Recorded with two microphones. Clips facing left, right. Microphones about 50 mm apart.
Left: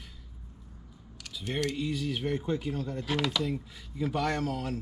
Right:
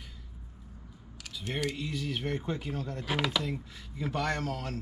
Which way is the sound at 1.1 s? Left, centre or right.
Centre.